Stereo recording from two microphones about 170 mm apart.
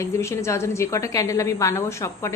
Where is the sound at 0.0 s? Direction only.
15° left (ahead or behind).